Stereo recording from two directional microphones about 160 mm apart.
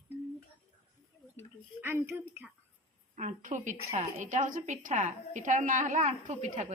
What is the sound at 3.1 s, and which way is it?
A woman's voice, 50° right (ahead or behind).